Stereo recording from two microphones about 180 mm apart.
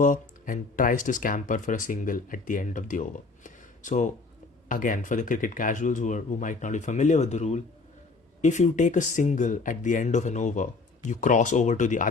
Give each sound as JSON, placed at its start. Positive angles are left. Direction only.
{"t": 0.0, "sound": "speech", "side_deg": 45}